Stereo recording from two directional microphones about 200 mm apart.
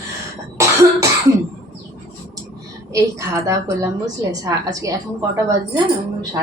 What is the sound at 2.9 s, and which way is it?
A woman's voice, 15° right (ahead or behind).